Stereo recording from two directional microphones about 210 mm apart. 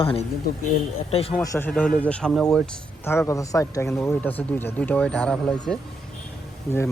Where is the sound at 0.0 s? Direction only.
25° left (ahead or behind).